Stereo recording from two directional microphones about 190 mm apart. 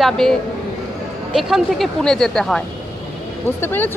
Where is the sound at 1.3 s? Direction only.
Centre (ahead or behind).